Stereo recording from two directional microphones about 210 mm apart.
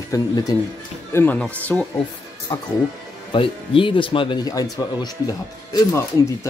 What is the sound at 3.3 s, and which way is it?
Speech, 25° left (ahead or behind).